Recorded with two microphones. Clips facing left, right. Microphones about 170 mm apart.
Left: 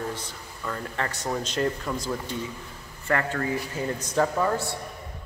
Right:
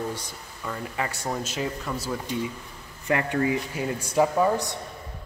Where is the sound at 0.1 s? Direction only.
10° right (ahead or behind).